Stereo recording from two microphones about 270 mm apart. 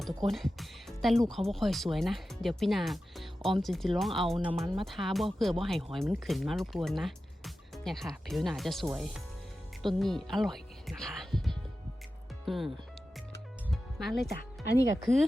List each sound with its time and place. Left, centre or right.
0.3 s speech: centre
13.7 s music: centre
14.3 s speech: left